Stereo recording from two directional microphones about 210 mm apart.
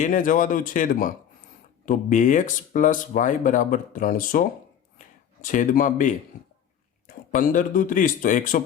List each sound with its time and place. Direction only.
0.0 s speech: 40° left (ahead or behind)
4.9 s a sound: 40° left (ahead or behind)
7.3 s speech: 40° left (ahead or behind)